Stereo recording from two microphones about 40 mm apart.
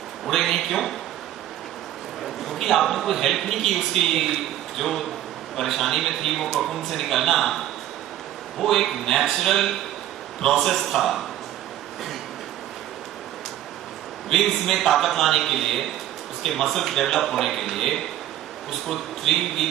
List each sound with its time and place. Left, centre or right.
0.3 s a man's voice: centre
2.4 s a man's voice: centre
14.3 s a man's voice: centre